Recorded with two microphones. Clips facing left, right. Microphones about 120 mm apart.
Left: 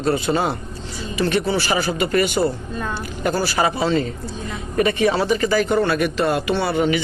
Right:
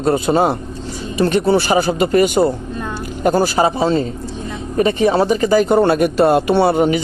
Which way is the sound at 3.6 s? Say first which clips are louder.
Right 4 dB; 35° right (ahead or behind).